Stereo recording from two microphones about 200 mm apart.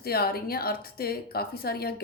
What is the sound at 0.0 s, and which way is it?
Speech, 50° left (ahead or behind).